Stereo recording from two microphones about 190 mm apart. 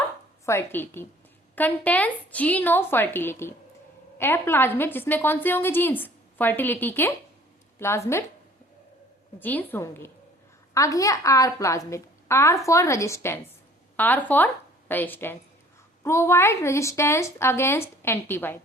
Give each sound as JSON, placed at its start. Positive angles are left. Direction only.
{"t": 0.4, "sound": "a woman's voice", "side_deg": 10}
{"t": 9.4, "sound": "a woman's voice", "side_deg": 10}